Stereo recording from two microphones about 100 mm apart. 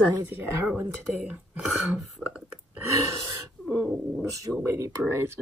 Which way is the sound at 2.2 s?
20° right (ahead or behind).